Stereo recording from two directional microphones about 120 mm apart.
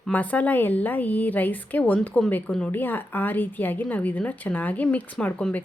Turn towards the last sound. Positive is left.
turn(degrees=10)  # may be behind; listen again after turning